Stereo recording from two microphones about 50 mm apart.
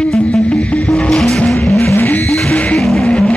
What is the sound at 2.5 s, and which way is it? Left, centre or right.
Music, left.